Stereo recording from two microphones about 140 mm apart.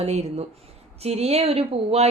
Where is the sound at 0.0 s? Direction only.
50° right (ahead or behind).